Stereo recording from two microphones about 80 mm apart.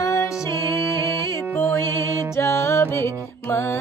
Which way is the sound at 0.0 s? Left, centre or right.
Left.